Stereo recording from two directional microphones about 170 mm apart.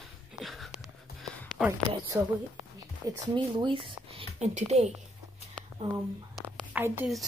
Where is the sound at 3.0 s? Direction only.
25° right (ahead or behind).